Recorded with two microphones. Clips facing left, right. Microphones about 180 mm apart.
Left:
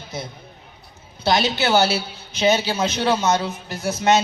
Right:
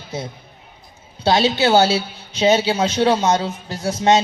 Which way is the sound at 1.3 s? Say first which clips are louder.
Right 4 dB; 25° right (ahead or behind).